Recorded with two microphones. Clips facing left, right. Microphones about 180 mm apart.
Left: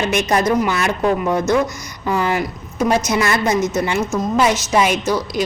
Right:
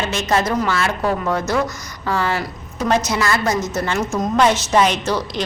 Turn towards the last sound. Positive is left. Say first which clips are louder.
# left 3 dB
turn(degrees=10)  # may be behind; listen again after turning